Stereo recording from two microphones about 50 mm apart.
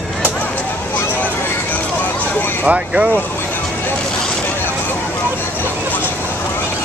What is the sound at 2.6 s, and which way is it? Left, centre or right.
Speech, right.